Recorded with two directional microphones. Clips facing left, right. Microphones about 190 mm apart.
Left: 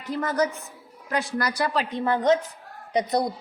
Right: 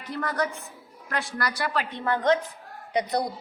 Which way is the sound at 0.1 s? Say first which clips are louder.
Left 4 dB; 20° left (ahead or behind).